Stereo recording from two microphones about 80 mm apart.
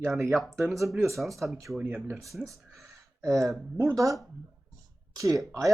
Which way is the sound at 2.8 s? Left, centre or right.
Right.